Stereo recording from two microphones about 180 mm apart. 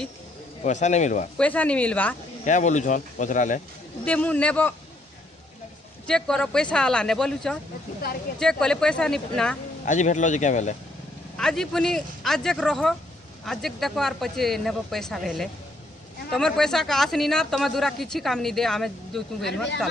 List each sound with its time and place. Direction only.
0.7 s speech: 40° left (ahead or behind)
1.4 s speech: 10° left (ahead or behind)
2.4 s speech: 40° left (ahead or behind)
4.0 s speech: 5° left (ahead or behind)
6.0 s speech: 5° left (ahead or behind)
9.8 s speech: 40° left (ahead or behind)
11.3 s speech: 5° left (ahead or behind)